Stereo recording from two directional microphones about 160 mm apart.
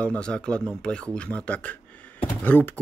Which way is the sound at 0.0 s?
5° left (ahead or behind).